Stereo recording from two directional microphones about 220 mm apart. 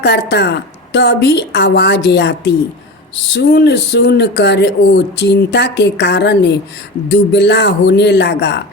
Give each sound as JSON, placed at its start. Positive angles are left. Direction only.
{"t": 0.0, "sound": "speech", "side_deg": 50}